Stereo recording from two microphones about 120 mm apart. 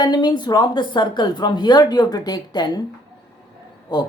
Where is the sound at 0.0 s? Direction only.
35° left (ahead or behind).